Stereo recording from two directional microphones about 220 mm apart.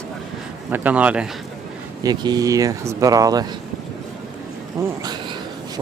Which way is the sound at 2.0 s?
15° right (ahead or behind).